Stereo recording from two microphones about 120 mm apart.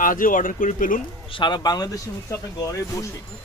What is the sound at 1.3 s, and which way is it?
Speech, 40° left (ahead or behind).